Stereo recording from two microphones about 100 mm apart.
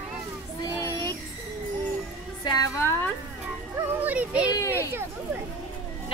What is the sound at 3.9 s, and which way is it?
Speech, 15° right (ahead or behind).